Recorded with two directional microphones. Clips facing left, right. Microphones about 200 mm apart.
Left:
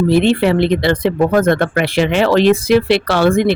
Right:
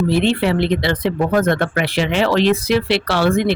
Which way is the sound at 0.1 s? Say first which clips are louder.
Left 4 dB; 50° left (ahead or behind).